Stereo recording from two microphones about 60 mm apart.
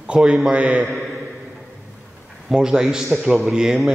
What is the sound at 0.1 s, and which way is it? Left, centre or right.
Speech, centre.